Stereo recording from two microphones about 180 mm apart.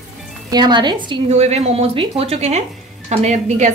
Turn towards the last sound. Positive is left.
turn(degrees=-40)  # may be behind; listen again after turning